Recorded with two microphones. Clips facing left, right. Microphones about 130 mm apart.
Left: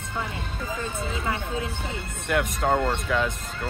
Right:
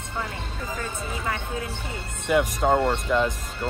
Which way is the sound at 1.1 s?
25° left (ahead or behind).